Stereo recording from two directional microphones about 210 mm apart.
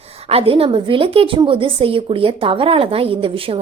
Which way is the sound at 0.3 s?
25° right (ahead or behind).